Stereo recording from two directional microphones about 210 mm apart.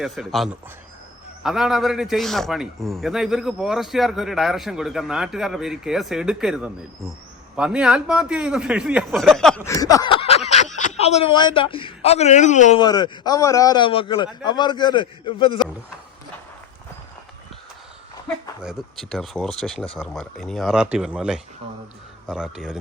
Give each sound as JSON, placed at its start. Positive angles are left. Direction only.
{"t": 0.0, "sound": "a man's voice", "side_deg": 0}
{"t": 9.6, "sound": "speech", "side_deg": 15}
{"t": 12.8, "sound": "a man's voice", "side_deg": 20}
{"t": 18.6, "sound": "a man's voice", "side_deg": 0}